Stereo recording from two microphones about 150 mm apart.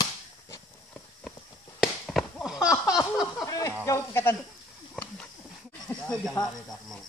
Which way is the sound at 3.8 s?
15° left (ahead or behind).